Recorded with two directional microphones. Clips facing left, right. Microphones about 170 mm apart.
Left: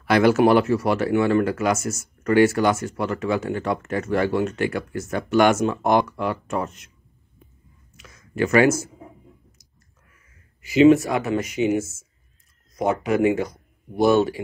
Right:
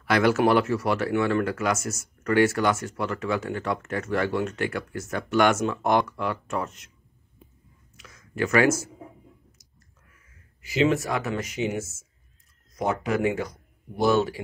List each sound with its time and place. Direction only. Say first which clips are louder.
0.0 s speech: left 4 dB; 20° left (ahead or behind)
8.0 s a sound: left 4 dB; 25° left (ahead or behind)
10.6 s speech: left 9 dB; 15° left (ahead or behind)